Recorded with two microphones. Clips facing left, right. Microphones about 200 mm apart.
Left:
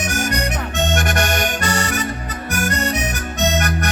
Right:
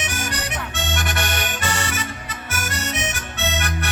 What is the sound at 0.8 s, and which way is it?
Accordion, 45° left (ahead or behind).